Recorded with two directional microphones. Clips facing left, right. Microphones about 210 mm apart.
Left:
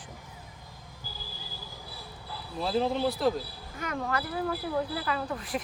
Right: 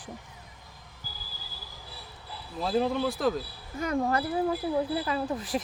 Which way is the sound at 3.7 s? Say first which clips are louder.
Right 5 dB; 30° right (ahead or behind).